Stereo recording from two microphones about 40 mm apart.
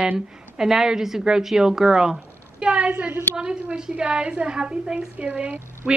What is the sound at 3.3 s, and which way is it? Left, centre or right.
A woman's voice, right.